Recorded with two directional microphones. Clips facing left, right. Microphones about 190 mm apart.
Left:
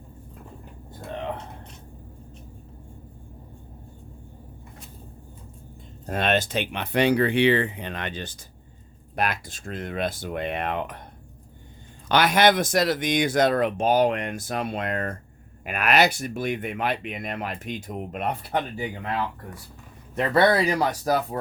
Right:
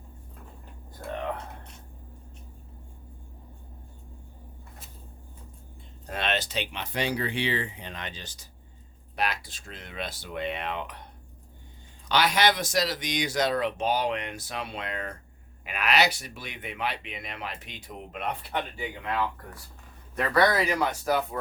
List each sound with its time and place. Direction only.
6.1 s speech: 50° left (ahead or behind)
12.0 s speech: 55° left (ahead or behind)
20.1 s speech: 25° left (ahead or behind)